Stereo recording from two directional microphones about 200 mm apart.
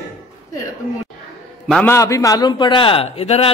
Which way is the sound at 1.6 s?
Centre (ahead or behind).